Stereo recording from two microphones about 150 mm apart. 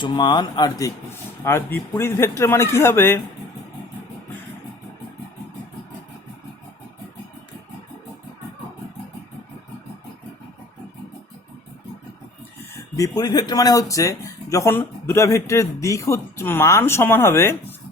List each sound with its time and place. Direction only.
0.0 s speech: 30° left (ahead or behind); by 3.2 s 15° left (ahead or behind)
13.0 s speech: 25° left (ahead or behind)